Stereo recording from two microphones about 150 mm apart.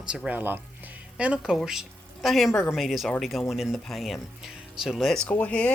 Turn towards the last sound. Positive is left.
turn(degrees=10)  # may be behind; listen again after turning